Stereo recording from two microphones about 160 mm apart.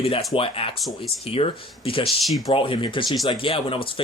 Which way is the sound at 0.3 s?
35° left (ahead or behind).